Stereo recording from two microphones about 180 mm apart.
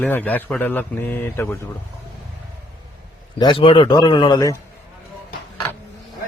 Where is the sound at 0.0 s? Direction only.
10° left (ahead or behind).